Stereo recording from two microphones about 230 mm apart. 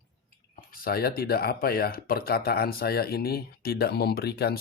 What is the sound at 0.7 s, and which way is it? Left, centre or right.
Speech, left.